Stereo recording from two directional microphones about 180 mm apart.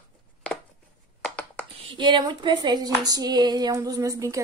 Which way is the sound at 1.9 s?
25° right (ahead or behind).